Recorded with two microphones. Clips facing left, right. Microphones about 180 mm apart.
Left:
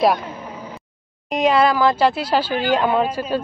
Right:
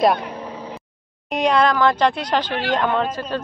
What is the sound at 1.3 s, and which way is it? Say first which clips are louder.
A woman's voice: left 1 dB; 5° left (ahead or behind).